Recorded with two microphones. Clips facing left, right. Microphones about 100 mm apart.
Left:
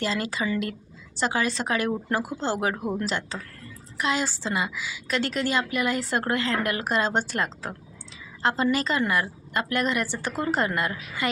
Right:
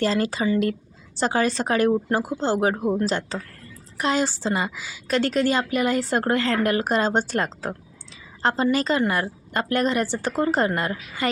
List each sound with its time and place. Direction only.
0.0 s a woman's voice: 40° right (ahead or behind)